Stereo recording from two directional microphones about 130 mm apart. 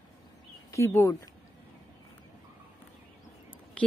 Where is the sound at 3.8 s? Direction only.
10° left (ahead or behind).